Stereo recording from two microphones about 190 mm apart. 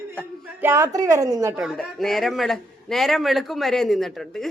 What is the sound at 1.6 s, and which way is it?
Speech, centre (ahead or behind).